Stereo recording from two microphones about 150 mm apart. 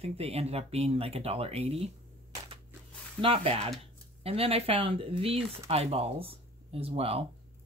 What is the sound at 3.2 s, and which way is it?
Speech, 40° right (ahead or behind).